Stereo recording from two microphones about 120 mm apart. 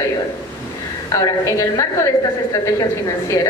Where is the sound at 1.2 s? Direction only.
30° left (ahead or behind).